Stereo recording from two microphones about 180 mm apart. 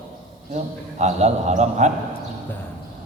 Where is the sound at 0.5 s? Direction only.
40° right (ahead or behind).